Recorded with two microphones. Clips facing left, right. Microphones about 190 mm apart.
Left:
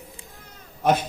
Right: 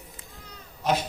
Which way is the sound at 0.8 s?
55° left (ahead or behind).